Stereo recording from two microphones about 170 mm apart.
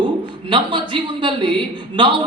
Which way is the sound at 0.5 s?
30° right (ahead or behind).